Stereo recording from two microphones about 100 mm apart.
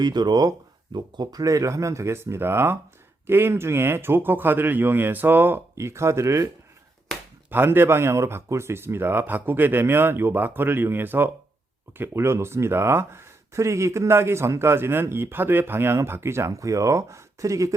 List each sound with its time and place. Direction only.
0.0 s speech: 45° right (ahead or behind); by 6.5 s 30° right (ahead or behind)
7.5 s speech: 20° right (ahead or behind)